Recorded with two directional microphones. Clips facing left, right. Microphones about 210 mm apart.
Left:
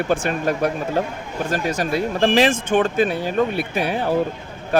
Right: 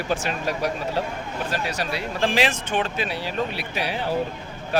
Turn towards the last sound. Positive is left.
turn(degrees=50)  # may be behind; listen again after turning